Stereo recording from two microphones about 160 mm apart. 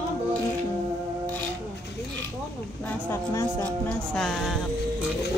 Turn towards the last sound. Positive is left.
turn(degrees=0)  # may be behind; listen again after turning